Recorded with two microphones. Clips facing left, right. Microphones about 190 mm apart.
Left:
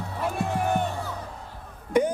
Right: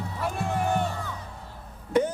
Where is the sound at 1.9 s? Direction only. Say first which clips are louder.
Left 1 dB; 15° left (ahead or behind).